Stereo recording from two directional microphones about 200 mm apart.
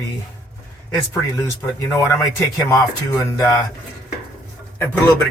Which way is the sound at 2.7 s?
20° left (ahead or behind).